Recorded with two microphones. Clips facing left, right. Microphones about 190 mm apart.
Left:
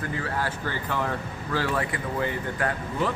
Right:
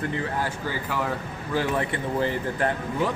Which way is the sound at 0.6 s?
5° right (ahead or behind).